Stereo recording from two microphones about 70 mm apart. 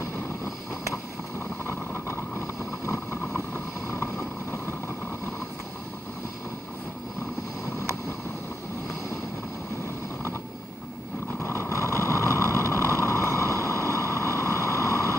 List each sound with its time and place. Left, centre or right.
1.7 s vehicle: left
11.4 s vehicle: left
13.0 s a sound: left